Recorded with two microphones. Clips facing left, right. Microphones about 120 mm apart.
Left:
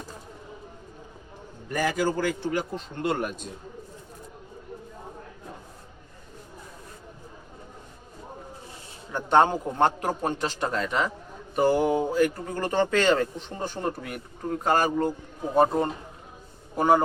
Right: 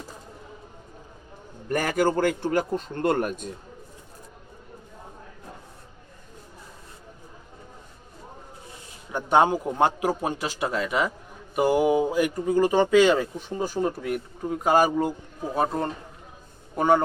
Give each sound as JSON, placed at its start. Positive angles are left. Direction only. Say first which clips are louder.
{"t": 1.7, "sound": "a man's voice", "louder": "right 3 dB", "side_deg": -55}
{"t": 9.1, "sound": "a man's voice", "louder": "even", "side_deg": -10}